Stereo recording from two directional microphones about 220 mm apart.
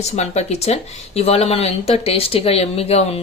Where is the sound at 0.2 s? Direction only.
30° left (ahead or behind).